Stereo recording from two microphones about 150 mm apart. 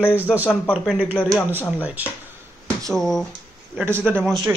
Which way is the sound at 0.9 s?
10° right (ahead or behind).